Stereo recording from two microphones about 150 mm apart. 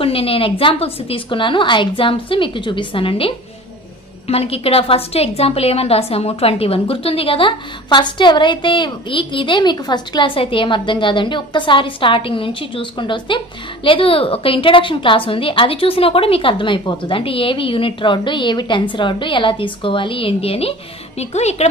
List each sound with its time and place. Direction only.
0.0 s a woman's voice: 40° left (ahead or behind)